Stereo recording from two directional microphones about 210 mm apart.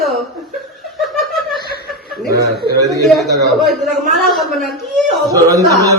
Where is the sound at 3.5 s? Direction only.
Centre (ahead or behind).